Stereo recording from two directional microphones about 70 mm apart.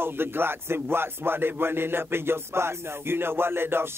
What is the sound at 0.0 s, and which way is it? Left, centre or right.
A man's voice, right.